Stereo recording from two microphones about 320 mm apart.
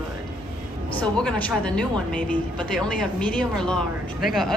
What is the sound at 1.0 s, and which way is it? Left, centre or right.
A woman's voice, centre.